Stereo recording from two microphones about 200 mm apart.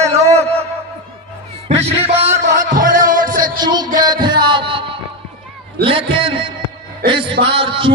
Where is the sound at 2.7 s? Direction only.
45° right (ahead or behind).